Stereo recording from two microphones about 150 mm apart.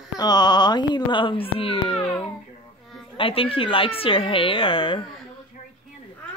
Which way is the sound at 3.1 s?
35° left (ahead or behind).